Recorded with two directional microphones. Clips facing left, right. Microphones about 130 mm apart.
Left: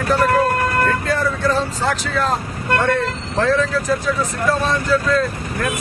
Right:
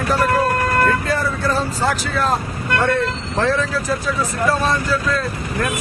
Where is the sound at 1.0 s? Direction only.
5° right (ahead or behind).